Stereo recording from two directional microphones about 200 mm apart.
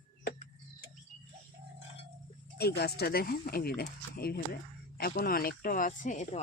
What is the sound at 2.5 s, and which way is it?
Speech, 55° left (ahead or behind).